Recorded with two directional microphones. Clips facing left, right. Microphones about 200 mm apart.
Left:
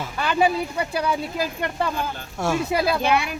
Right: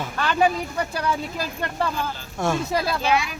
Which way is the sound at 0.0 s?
10° left (ahead or behind).